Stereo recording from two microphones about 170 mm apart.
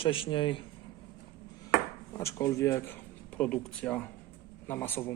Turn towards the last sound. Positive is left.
turn(degrees=10)  # may be behind; listen again after turning